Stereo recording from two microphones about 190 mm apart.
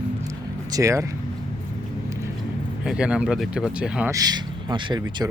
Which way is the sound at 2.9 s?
5° right (ahead or behind).